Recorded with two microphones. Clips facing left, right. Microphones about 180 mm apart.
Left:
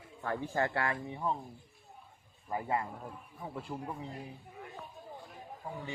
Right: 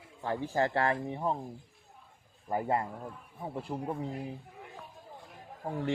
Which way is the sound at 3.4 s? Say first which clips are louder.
Right 4 dB; 30° right (ahead or behind).